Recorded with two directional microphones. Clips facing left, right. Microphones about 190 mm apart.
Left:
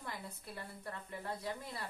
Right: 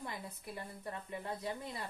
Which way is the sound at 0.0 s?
20° right (ahead or behind).